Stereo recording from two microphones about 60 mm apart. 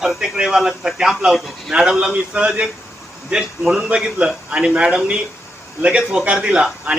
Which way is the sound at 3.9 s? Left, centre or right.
Centre.